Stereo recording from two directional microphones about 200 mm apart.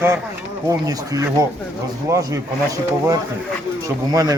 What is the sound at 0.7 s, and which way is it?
Speech, 15° right (ahead or behind).